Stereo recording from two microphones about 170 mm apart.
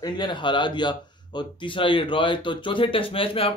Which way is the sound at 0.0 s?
25° left (ahead or behind).